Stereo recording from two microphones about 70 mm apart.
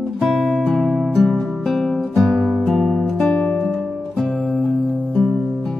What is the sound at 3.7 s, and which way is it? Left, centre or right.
Music, centre.